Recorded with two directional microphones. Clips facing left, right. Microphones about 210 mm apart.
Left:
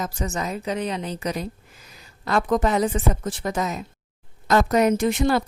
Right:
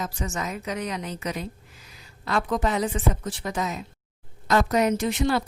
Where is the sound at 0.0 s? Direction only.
40° left (ahead or behind).